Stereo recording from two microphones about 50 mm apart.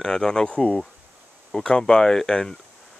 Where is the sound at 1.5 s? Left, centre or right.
Centre.